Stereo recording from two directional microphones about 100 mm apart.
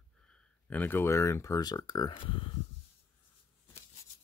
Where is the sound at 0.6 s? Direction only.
15° left (ahead or behind).